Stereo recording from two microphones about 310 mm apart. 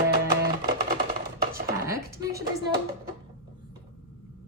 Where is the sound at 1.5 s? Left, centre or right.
Right.